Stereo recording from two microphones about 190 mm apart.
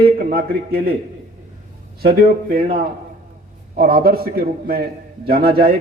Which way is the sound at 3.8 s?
50° right (ahead or behind).